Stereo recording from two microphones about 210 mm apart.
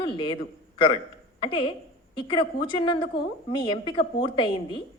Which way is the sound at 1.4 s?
25° left (ahead or behind).